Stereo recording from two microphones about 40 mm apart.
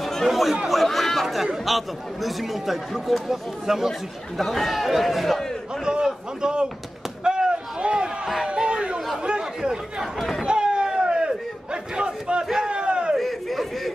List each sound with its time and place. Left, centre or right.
0.0 s chatter: centre
1.6 s speech: centre
4.4 s speech: centre
5.9 s a sound: centre
8.5 s chatter: right
9.2 s a sound: right
10.4 s crowd: right
12.5 s a sound: right
13.2 s chatter: centre